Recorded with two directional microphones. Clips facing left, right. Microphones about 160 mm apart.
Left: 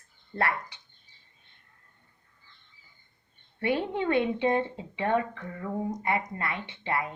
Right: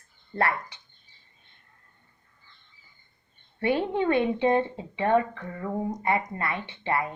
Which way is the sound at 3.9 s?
35° right (ahead or behind).